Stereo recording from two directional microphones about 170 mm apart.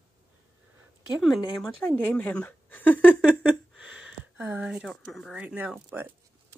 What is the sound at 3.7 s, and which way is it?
Speech, 5° right (ahead or behind).